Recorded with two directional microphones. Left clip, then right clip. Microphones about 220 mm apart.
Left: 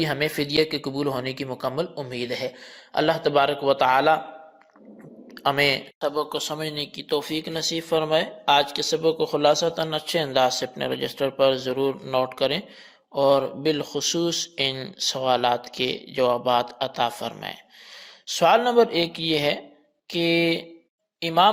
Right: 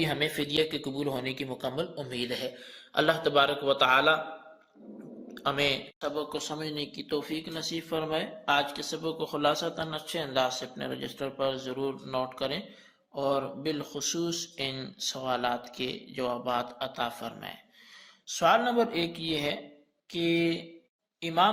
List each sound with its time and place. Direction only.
0.0 s speech: 25° left (ahead or behind)
5.3 s a man's voice: 30° left (ahead or behind)